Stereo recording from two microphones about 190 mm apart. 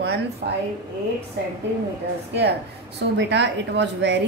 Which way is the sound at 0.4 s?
55° right (ahead or behind).